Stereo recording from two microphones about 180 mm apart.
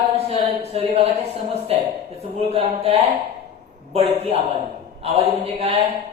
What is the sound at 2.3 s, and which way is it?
A man's voice, 35° right (ahead or behind).